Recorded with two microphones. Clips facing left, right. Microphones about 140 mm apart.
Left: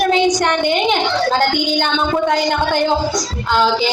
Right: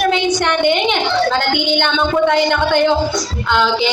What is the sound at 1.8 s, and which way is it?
A woman's voice, 40° left (ahead or behind).